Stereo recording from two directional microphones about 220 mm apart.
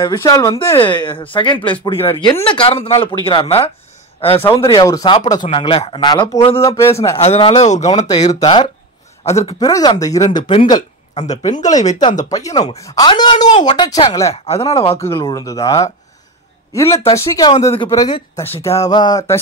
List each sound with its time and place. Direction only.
0.0 s speech: 15° left (ahead or behind)
7.2 s speech: 30° left (ahead or behind)
9.6 s speech: 15° left (ahead or behind); by 12.0 s 35° left (ahead or behind)
12.0 s speech: 20° left (ahead or behind)
12.5 s speech: 30° left (ahead or behind)
12.8 s speech: 20° left (ahead or behind)
14.3 s speech: 25° left (ahead or behind)